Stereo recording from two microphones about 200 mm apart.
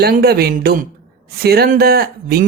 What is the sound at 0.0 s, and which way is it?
Speech, 50° right (ahead or behind).